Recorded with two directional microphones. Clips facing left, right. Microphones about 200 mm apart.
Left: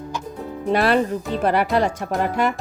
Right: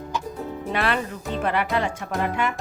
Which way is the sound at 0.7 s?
40° left (ahead or behind).